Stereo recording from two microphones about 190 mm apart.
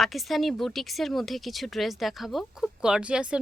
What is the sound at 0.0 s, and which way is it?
A woman's voice, centre (ahead or behind).